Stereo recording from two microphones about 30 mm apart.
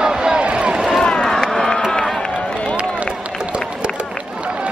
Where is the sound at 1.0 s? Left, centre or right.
Left.